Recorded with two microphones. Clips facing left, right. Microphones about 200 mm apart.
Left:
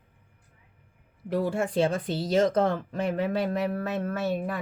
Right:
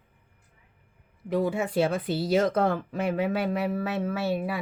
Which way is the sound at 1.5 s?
5° right (ahead or behind).